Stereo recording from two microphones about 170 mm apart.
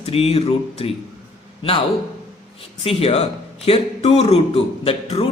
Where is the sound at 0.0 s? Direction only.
35° left (ahead or behind).